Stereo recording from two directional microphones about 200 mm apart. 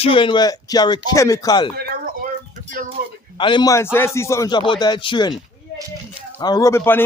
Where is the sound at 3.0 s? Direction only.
45° right (ahead or behind).